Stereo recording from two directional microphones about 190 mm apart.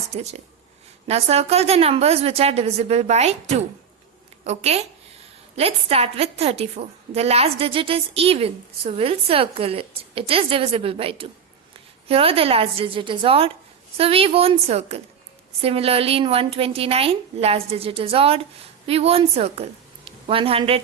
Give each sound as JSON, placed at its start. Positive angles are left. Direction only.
{"t": 0.1, "sound": "a woman's voice", "side_deg": -35}